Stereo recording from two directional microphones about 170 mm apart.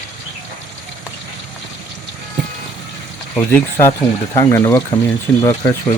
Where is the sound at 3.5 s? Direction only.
15° left (ahead or behind).